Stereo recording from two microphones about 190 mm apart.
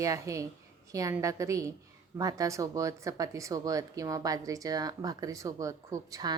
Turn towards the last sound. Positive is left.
turn(degrees=-20)  # may be behind; listen again after turning